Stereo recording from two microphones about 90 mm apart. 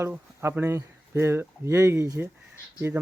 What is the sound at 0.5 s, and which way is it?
Speech, 25° right (ahead or behind).